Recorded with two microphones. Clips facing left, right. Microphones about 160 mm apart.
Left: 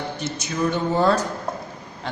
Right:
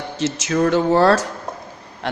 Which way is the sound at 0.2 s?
90° right.